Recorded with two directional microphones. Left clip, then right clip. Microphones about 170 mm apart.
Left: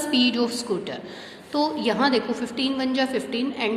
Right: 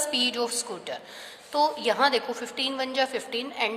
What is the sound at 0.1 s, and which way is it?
A woman's voice, 35° right (ahead or behind).